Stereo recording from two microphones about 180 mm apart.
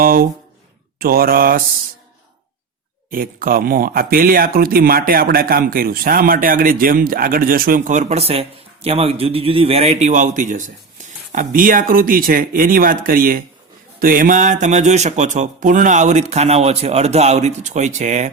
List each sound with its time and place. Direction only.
0.0 s speech: 55° right (ahead or behind)
3.1 s speech: 50° right (ahead or behind)